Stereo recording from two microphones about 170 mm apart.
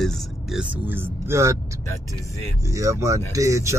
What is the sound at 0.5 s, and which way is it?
Speech, 15° right (ahead or behind).